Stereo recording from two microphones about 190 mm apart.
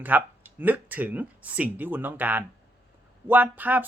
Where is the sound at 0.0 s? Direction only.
10° right (ahead or behind).